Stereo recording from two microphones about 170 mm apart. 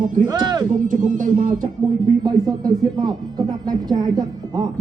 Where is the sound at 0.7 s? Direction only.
50° right (ahead or behind).